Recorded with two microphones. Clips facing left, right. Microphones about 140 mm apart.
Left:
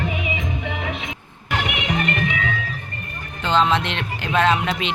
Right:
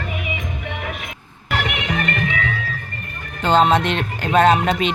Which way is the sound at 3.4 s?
45° right (ahead or behind).